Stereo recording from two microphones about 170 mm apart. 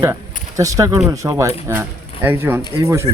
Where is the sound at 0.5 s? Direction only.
20° right (ahead or behind).